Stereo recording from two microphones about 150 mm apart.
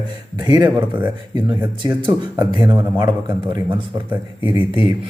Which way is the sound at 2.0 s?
30° right (ahead or behind).